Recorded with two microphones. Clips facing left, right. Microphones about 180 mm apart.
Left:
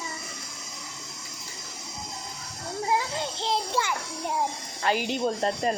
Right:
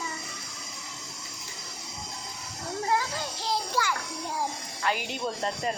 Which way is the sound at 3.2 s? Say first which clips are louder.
Left 3 dB; 25° left (ahead or behind).